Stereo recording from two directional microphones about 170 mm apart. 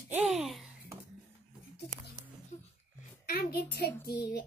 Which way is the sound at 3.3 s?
65° left (ahead or behind).